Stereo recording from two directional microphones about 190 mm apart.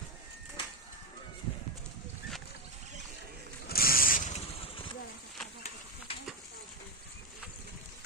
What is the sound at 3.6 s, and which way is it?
Vehicle, 50° left (ahead or behind).